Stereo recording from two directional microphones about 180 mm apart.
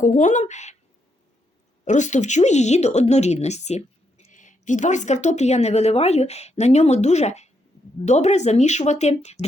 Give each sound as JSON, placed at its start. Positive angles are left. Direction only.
{"t": 0.0, "sound": "speech", "side_deg": 45}
{"t": 1.8, "sound": "a woman's voice", "side_deg": 40}